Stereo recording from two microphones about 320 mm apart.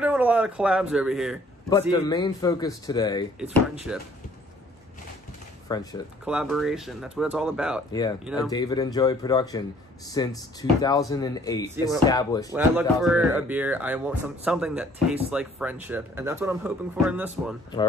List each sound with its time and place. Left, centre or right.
0.0 s speech: centre
1.7 s a man's voice: centre
3.5 s speech: centre
5.7 s a man's voice: centre
6.2 s speech: centre
7.9 s a man's voice: centre
12.5 s speech: centre